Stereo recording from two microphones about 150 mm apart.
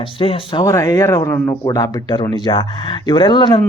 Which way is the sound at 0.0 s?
35° left (ahead or behind).